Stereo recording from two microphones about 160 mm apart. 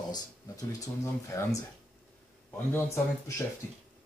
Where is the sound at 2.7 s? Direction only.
15° left (ahead or behind).